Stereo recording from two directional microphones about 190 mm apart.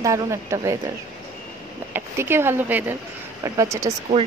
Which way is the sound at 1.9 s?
10° right (ahead or behind).